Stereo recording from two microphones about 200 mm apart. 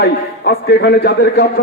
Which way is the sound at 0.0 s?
55° left (ahead or behind).